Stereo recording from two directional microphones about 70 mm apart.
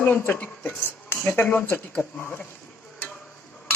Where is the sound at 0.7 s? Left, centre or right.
Left.